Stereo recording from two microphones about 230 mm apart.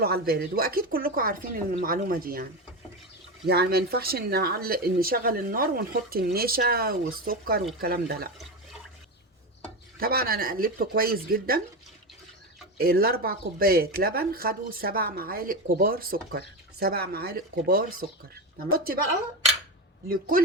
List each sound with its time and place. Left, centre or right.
0.0 s speech: right
10.0 s speech: right
12.8 s speech: right
20.1 s speech: right